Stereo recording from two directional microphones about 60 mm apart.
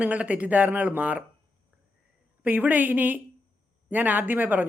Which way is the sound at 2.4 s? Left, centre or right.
Right.